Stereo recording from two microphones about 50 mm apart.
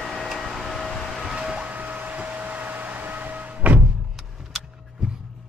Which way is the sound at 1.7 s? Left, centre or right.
Right.